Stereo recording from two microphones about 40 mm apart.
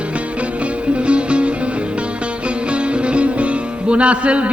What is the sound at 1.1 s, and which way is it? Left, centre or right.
Music, right.